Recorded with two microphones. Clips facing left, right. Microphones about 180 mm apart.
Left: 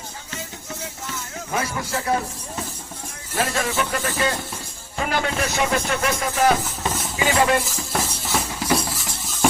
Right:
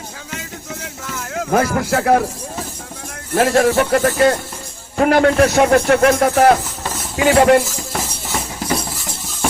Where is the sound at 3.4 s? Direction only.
55° right (ahead or behind).